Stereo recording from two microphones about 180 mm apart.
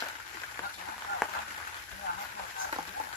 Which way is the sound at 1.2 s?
Centre (ahead or behind).